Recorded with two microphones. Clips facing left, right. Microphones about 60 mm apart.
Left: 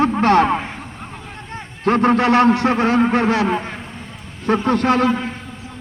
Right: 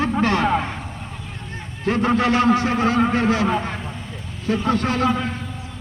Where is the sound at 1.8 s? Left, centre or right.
Left.